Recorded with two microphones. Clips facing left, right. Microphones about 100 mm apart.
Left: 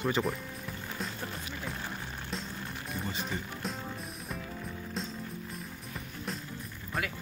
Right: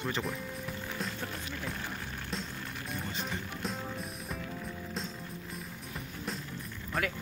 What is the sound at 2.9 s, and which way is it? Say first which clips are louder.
Music: left 2 dB; centre (ahead or behind).